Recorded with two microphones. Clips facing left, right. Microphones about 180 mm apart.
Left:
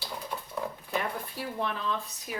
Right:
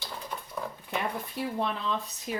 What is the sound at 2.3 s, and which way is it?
Speech, 25° right (ahead or behind).